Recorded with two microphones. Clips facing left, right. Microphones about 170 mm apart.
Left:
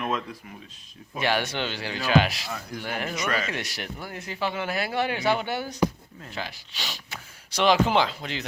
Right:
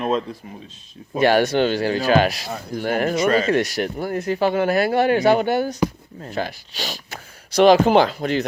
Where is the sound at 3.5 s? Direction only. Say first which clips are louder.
Right 13 dB; 45° right (ahead or behind).